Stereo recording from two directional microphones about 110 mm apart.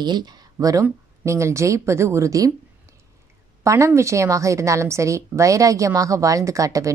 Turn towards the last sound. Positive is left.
turn(degrees=-30)  # may be behind; listen again after turning